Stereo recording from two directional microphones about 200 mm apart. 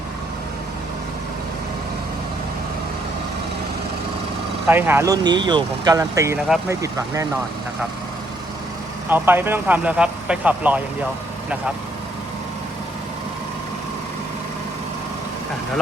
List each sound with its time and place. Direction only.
4.7 s speech: 10° right (ahead or behind)
9.0 s speech: 10° right (ahead or behind)